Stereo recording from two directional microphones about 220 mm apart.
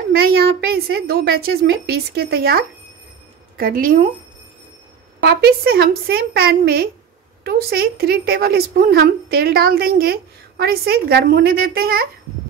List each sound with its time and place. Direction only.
0.1 s a woman's voice: 45° right (ahead or behind)
5.2 s a woman's voice: 45° right (ahead or behind)